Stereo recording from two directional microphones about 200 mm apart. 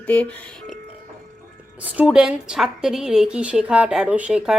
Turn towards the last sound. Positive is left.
turn(degrees=-5)  # may be behind; listen again after turning